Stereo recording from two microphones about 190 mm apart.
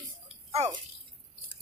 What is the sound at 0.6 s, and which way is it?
Speech, 35° right (ahead or behind).